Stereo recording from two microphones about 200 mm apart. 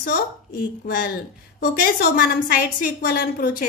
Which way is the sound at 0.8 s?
50° left (ahead or behind).